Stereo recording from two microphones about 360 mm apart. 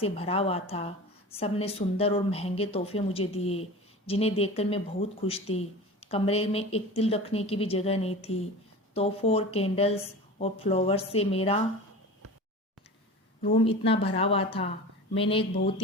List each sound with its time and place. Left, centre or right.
0.0 s a woman's voice: centre
13.7 s a woman's voice: centre